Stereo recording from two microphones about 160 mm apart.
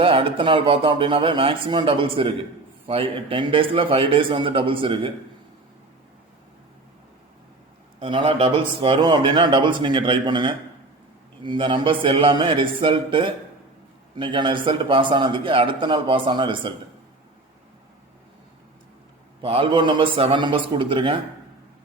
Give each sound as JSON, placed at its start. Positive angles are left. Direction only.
{"t": 0.0, "sound": "a man's voice", "side_deg": -35}
{"t": 7.9, "sound": "a man's voice", "side_deg": -35}
{"t": 19.4, "sound": "a man's voice", "side_deg": -35}